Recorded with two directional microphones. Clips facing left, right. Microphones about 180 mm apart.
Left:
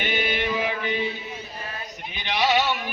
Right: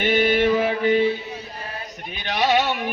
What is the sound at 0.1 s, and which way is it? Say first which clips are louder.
Music: right 10 dB; 45° right (ahead or behind).